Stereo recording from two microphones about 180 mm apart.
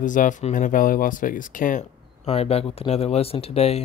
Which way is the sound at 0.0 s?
45° left (ahead or behind).